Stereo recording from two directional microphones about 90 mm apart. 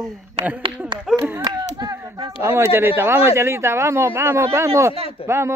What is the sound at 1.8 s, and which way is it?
Speech, 45° right (ahead or behind).